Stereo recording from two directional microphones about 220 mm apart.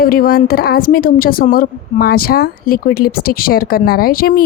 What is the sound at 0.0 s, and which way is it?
A woman's voice, 40° left (ahead or behind).